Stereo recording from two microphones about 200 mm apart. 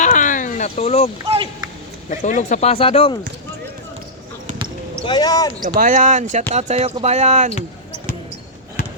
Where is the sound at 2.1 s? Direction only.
40° left (ahead or behind).